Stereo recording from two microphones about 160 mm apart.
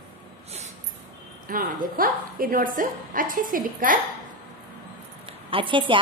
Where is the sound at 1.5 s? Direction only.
60° right (ahead or behind).